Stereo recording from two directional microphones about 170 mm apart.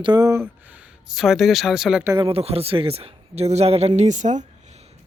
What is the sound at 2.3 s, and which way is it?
A man's voice, 35° right (ahead or behind).